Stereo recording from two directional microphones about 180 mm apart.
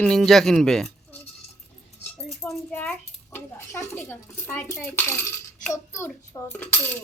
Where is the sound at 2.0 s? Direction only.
10° left (ahead or behind).